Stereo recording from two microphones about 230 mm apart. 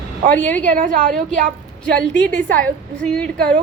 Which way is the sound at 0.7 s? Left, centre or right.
Right.